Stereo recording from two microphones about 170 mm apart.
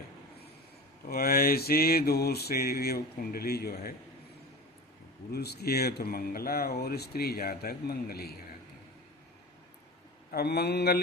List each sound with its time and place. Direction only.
1.0 s speech: 60° left (ahead or behind)
5.3 s speech: 70° left (ahead or behind)
10.3 s speech: 75° left (ahead or behind)